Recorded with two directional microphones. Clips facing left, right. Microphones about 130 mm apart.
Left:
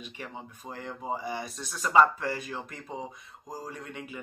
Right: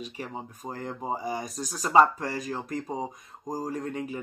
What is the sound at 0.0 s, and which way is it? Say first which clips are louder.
Speech: right 4 dB; 35° right (ahead or behind).